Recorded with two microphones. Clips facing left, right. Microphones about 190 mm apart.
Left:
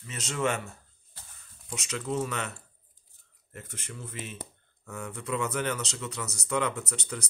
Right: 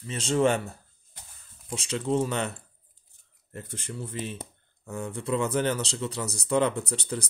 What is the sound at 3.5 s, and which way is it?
Speech, 30° right (ahead or behind).